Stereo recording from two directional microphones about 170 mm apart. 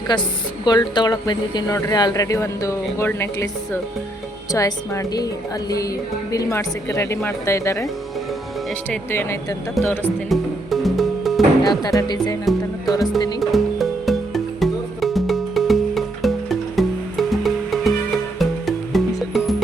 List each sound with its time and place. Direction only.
0.1 s a woman's voice: 25° left (ahead or behind)
4.5 s a woman's voice: 20° left (ahead or behind)
8.9 s speech: 15° left (ahead or behind)
10.2 s music: centre (ahead or behind)
11.7 s a woman's voice: 20° left (ahead or behind)
12.5 s music: centre (ahead or behind)